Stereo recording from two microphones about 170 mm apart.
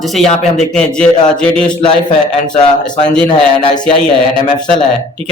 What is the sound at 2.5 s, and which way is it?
A man's voice, 25° left (ahead or behind).